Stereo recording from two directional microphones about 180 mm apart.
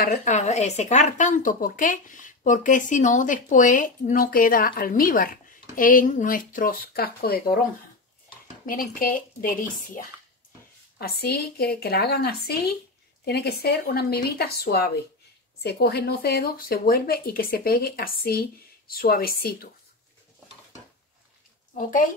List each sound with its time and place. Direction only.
0.0 s speech: 50° left (ahead or behind)
8.6 s speech: 50° left (ahead or behind)
11.0 s speech: 60° left (ahead or behind)